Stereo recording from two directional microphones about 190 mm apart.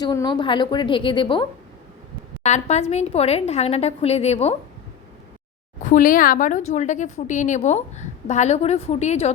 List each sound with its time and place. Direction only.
0.0 s a woman's voice: 20° left (ahead or behind); by 4.5 s 35° left (ahead or behind)
5.8 s speech: 45° left (ahead or behind)